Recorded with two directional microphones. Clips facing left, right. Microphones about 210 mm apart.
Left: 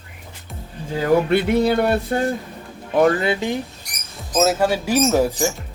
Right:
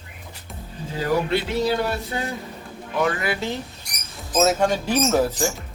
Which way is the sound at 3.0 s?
40° left (ahead or behind).